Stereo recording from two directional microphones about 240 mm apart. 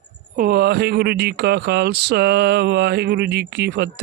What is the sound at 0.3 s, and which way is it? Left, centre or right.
Speech, right.